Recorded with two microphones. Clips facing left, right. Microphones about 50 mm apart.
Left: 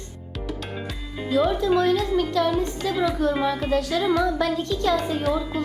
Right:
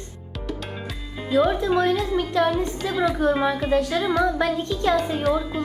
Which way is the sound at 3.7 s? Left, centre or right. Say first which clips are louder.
Right 2 dB; centre.